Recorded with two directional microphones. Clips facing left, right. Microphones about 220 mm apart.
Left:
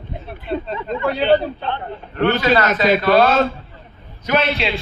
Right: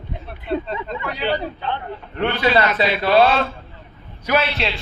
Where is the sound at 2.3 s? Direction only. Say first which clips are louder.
Left 2 dB; 45° left (ahead or behind).